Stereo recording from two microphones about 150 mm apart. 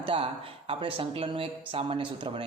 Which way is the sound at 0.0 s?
35° right (ahead or behind).